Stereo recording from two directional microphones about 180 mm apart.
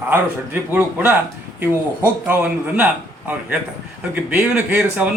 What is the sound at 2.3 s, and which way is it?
A man's voice, 10° right (ahead or behind).